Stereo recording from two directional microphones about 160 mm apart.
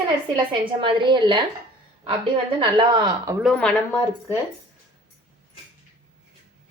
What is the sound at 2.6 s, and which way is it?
Speech, 30° right (ahead or behind).